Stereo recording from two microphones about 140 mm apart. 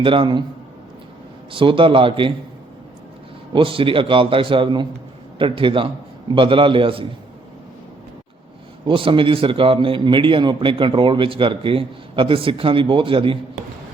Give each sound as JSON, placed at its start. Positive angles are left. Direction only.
{"t": 0.0, "sound": "a man's voice", "side_deg": -35}
{"t": 1.5, "sound": "a man's voice", "side_deg": -40}
{"t": 3.5, "sound": "a man's voice", "side_deg": -40}
{"t": 8.9, "sound": "a man's voice", "side_deg": -40}